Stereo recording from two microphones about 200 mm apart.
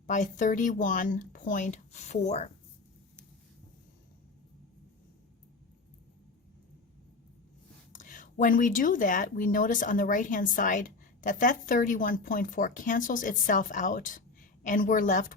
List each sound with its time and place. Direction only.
0.1 s speech: 40° left (ahead or behind)
7.9 s speech: 40° left (ahead or behind)